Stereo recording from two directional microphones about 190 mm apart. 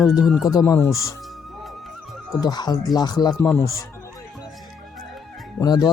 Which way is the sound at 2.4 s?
20° left (ahead or behind).